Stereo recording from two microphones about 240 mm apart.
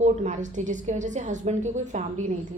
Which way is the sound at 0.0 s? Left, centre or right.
Right.